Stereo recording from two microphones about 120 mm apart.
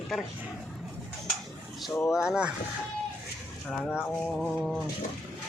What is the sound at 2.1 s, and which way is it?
Speech, 5° right (ahead or behind).